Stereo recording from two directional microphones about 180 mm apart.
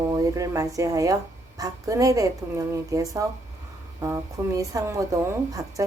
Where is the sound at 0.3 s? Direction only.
20° right (ahead or behind).